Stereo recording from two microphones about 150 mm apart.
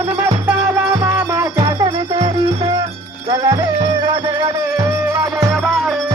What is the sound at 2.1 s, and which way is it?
Music, 30° right (ahead or behind).